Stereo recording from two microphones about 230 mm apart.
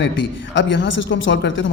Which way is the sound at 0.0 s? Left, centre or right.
Left.